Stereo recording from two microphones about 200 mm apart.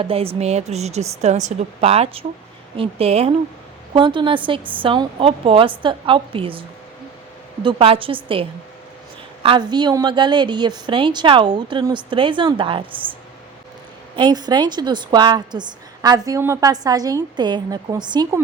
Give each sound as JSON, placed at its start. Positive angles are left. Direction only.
{"t": 0.0, "sound": "a woman's voice", "side_deg": -30}
{"t": 14.2, "sound": "a woman's voice", "side_deg": -20}